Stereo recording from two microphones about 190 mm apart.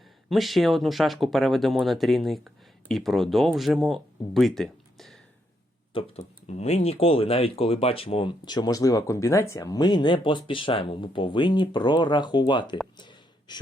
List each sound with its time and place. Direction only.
0.3 s speech: centre (ahead or behind)
5.9 s speech: 30° left (ahead or behind)
13.0 s a sound: 25° left (ahead or behind)